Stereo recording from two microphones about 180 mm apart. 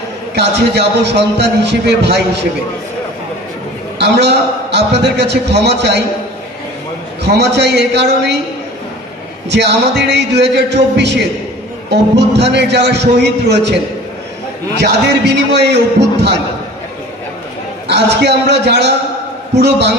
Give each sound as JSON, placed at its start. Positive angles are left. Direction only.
{"t": 0.4, "sound": "a man's voice", "side_deg": -70}
{"t": 4.0, "sound": "a man's voice", "side_deg": -70}
{"t": 7.2, "sound": "a man's voice", "side_deg": -65}
{"t": 9.5, "sound": "a man's voice", "side_deg": -70}
{"t": 14.8, "sound": "a man's voice", "side_deg": -70}
{"t": 17.8, "sound": "a man's voice", "side_deg": -70}